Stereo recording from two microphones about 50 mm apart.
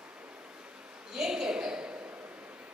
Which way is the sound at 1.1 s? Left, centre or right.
Centre.